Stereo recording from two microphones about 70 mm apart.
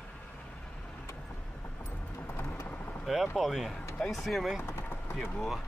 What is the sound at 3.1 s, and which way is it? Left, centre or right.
Speech, centre.